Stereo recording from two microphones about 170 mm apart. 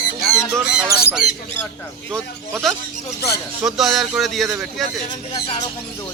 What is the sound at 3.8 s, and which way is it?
Speech, centre (ahead or behind).